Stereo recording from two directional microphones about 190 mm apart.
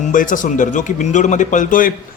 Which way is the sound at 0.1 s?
45° left (ahead or behind).